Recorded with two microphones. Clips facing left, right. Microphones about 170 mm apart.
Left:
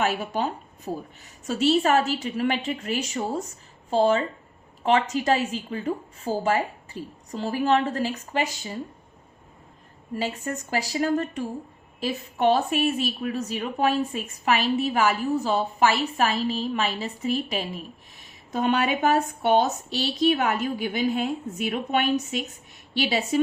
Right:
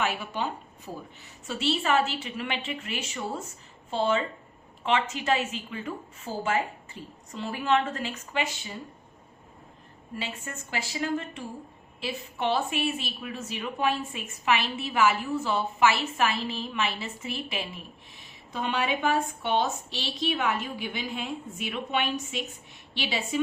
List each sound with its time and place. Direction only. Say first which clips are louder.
0.0 s a woman's voice: left 4 dB; 40° left (ahead or behind)
10.2 s a woman's voice: left 8 dB; 40° left (ahead or behind)